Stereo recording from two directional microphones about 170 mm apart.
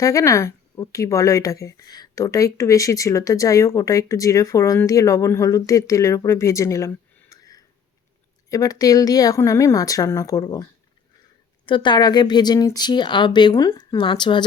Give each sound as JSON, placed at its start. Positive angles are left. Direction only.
{"t": 0.0, "sound": "speech", "side_deg": 20}